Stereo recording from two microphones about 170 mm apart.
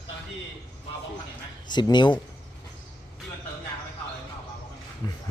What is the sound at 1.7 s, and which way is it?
Speech, 25° left (ahead or behind).